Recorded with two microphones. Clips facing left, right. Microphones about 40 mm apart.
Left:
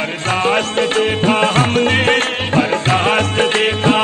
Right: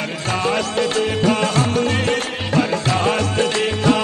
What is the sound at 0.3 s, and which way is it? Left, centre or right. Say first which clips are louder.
Music: left 4 dB; left.